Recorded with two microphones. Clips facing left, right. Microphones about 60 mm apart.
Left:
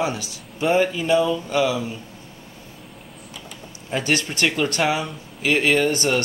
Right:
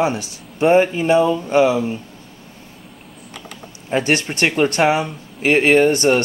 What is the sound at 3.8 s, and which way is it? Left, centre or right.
Speech, right.